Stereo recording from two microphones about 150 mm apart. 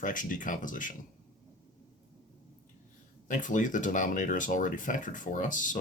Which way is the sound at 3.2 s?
60° left (ahead or behind).